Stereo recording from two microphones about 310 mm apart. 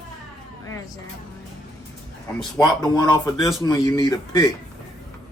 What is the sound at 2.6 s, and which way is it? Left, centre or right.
Speech, centre.